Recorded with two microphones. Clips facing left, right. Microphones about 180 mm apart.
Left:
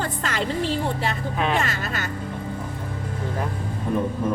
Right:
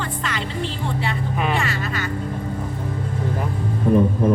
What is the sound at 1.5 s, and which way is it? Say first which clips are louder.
Speech: right 1 dB; 45° left (ahead or behind).